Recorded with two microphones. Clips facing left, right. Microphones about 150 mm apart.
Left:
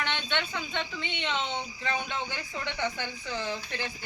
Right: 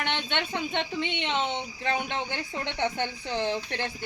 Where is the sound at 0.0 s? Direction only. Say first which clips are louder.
Right 3 dB; 55° right (ahead or behind).